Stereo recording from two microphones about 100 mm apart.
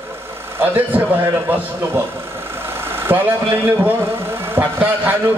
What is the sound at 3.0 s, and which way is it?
A man's voice, 20° right (ahead or behind).